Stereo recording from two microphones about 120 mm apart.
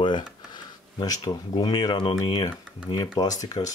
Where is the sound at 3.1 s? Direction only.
30° left (ahead or behind).